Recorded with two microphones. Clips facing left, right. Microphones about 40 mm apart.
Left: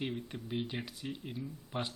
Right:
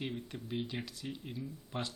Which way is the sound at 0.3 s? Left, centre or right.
Centre.